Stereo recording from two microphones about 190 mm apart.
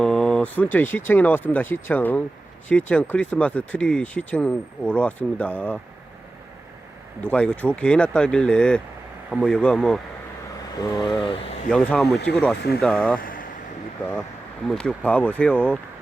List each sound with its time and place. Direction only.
0.0 s speech: 5° left (ahead or behind)
7.3 s speech: 5° left (ahead or behind)
10.8 s speech: 20° left (ahead or behind)
11.7 s speech: 5° left (ahead or behind)
12.0 s speech: 60° left (ahead or behind)
12.3 s speech: 5° left (ahead or behind)
13.1 s speech: 45° left (ahead or behind)
14.7 s speech: 5° left (ahead or behind)